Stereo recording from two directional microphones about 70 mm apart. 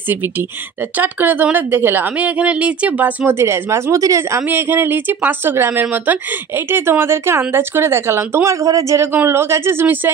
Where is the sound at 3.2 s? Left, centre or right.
Right.